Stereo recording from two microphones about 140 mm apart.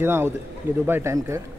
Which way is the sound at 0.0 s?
15° right (ahead or behind).